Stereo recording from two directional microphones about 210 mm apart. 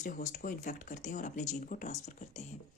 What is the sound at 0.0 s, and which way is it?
Speech, 40° left (ahead or behind).